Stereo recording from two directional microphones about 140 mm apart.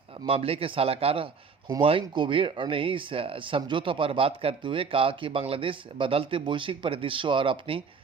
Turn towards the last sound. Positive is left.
turn(degrees=-40)  # may be behind; listen again after turning